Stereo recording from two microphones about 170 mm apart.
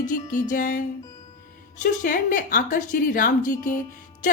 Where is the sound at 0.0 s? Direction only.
50° left (ahead or behind).